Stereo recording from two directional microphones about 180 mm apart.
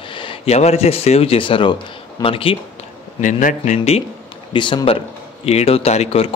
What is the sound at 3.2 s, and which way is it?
Speech, 45° left (ahead or behind).